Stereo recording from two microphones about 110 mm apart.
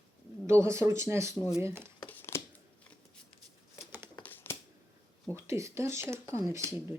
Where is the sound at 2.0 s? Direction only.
20° left (ahead or behind).